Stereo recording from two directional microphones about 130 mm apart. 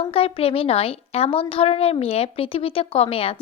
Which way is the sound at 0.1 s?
45° left (ahead or behind).